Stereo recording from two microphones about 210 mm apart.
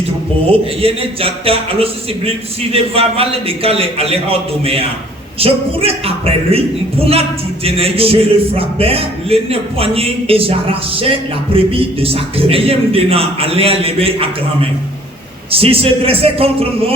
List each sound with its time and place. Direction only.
0.5 s speech: 25° right (ahead or behind)
15.4 s speech: 25° right (ahead or behind)